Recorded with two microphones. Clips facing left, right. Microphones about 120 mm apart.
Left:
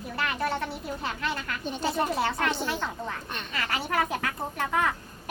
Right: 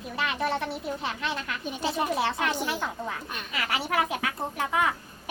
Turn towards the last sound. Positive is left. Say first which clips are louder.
# right 1 dB
turn(degrees=-5)  # may be behind; listen again after turning